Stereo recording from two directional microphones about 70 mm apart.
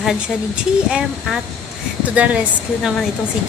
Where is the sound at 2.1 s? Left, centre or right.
Centre.